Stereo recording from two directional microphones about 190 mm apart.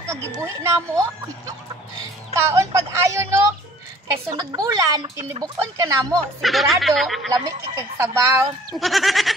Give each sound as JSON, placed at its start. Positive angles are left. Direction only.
{"t": 0.1, "sound": "a woman's voice", "side_deg": -15}
{"t": 2.3, "sound": "a woman's voice", "side_deg": -15}
{"t": 6.4, "sound": "speech", "side_deg": 0}
{"t": 7.4, "sound": "a woman's voice", "side_deg": -15}
{"t": 8.7, "sound": "speech", "side_deg": 0}